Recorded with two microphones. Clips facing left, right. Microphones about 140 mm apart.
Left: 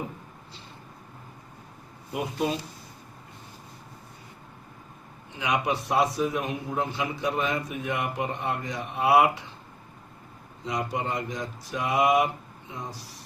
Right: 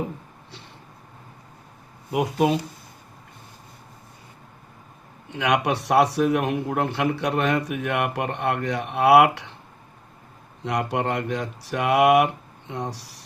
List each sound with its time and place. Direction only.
2.1 s a man's voice: 70° right (ahead or behind)
5.3 s a man's voice: 70° right (ahead or behind)
10.6 s a man's voice: 65° right (ahead or behind)